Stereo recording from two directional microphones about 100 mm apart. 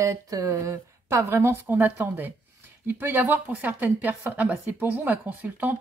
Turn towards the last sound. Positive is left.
turn(degrees=-15)  # may be behind; listen again after turning